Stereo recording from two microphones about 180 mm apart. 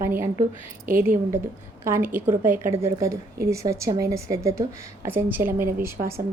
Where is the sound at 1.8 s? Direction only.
10° right (ahead or behind).